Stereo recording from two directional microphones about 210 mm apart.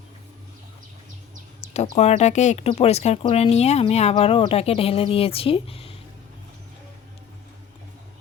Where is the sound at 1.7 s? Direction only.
30° left (ahead or behind).